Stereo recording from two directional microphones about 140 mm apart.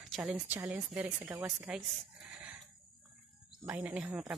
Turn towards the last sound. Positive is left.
turn(degrees=-5)  # may be behind; listen again after turning